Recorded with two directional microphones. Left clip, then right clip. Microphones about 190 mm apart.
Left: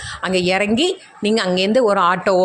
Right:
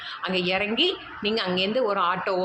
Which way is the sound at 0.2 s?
50° left (ahead or behind).